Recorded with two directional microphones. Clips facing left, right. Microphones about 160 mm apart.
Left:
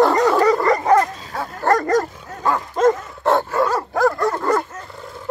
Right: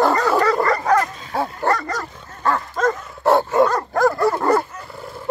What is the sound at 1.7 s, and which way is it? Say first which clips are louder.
Dog: left 9 dB; 45° left (ahead or behind).